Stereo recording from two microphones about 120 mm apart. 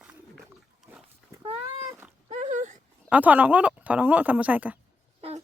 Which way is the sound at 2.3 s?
75° right (ahead or behind).